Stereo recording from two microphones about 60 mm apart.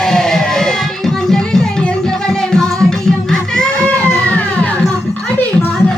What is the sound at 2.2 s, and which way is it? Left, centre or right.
Music, centre.